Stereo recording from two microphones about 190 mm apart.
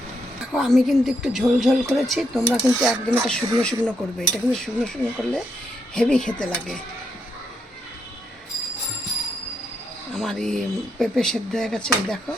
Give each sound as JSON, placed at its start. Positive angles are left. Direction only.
{"t": 0.5, "sound": "a woman's voice", "side_deg": 0}
{"t": 10.2, "sound": "a woman's voice", "side_deg": 0}